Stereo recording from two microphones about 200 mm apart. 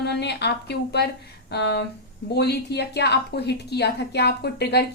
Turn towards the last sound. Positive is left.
turn(degrees=55)  # may be behind; listen again after turning